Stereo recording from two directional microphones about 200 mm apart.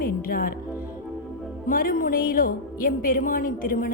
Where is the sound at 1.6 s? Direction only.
45° left (ahead or behind).